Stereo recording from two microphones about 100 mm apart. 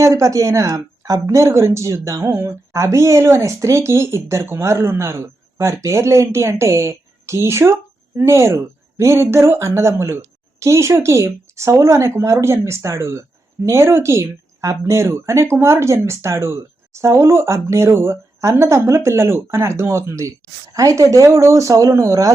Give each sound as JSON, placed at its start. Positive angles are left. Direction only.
{"t": 0.0, "sound": "a woman's voice", "side_deg": -30}